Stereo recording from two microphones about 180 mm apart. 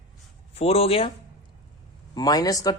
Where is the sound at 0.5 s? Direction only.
35° left (ahead or behind).